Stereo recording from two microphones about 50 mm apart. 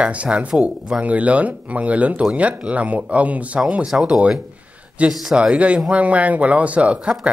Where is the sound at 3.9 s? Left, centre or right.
Centre.